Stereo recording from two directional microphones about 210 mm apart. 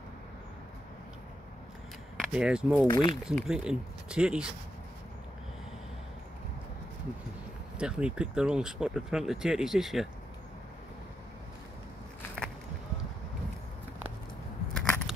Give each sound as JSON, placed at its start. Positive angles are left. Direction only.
{"t": 2.1, "sound": "speech", "side_deg": -5}
{"t": 2.9, "sound": "speech", "side_deg": 20}
{"t": 3.3, "sound": "speech", "side_deg": -5}
{"t": 7.8, "sound": "speech", "side_deg": -5}
{"t": 14.7, "sound": "a sound", "side_deg": 5}